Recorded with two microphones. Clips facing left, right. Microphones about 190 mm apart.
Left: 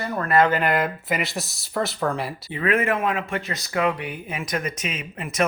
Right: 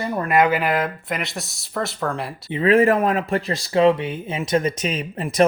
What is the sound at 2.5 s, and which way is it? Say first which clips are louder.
Speech: right 7 dB; 30° right (ahead or behind).